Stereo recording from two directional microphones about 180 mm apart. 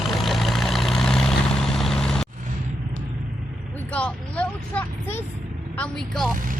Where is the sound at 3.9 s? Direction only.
5° left (ahead or behind).